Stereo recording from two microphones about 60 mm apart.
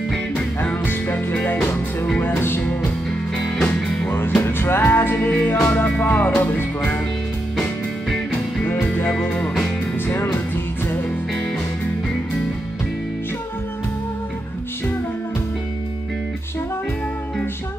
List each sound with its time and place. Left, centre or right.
0.6 s music: left
2.6 s music: left
3.3 s music: centre
4.5 s music: left
9.2 s music: left
10.0 s music: left